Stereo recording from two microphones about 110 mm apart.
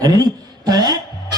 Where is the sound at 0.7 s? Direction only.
35° right (ahead or behind).